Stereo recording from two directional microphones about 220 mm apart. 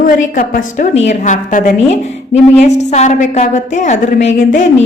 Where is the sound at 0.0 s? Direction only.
40° left (ahead or behind).